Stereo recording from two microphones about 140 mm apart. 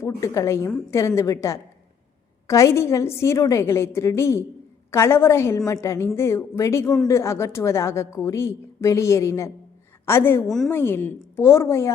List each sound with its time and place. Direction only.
0.0 s a woman's voice: 20° left (ahead or behind)